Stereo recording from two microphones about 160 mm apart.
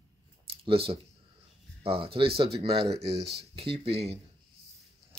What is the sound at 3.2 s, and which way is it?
Speech, 90° right.